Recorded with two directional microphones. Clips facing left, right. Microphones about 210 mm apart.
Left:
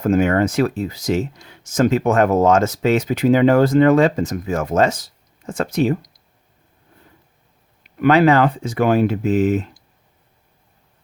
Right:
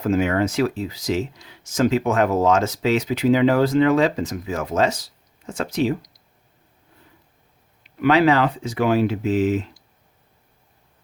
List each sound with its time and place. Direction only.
0.0 s speech: 50° left (ahead or behind)
7.9 s speech: 50° left (ahead or behind)